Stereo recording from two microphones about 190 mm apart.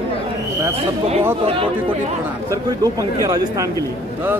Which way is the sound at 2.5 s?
20° right (ahead or behind).